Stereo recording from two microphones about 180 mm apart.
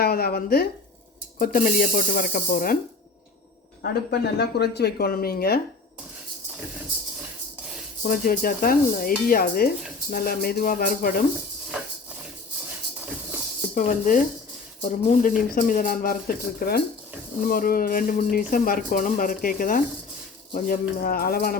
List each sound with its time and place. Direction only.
0.0 s speech: 60° left (ahead or behind)
4.1 s speech: 65° left (ahead or behind)
8.0 s speech: 55° left (ahead or behind)
13.7 s speech: 45° left (ahead or behind)